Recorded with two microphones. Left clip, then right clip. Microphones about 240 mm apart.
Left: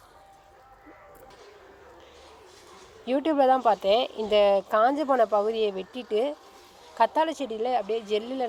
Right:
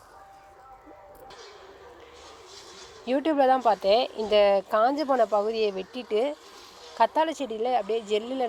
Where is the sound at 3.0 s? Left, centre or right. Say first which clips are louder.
Even; centre.